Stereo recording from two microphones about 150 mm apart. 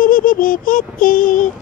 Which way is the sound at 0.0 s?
65° left (ahead or behind).